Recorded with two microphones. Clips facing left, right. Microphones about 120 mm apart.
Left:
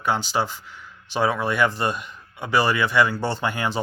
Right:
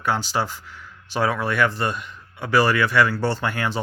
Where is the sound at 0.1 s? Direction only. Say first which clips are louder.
Even; 25° left (ahead or behind).